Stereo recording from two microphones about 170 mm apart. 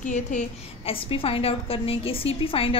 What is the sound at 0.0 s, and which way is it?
Speech, 45° left (ahead or behind).